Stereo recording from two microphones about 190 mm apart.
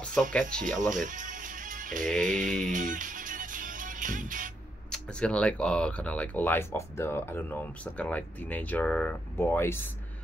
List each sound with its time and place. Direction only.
0.3 s speech: 5° left (ahead or behind)
0.7 s music: 40° right (ahead or behind)
4.9 s speech: 5° left (ahead or behind)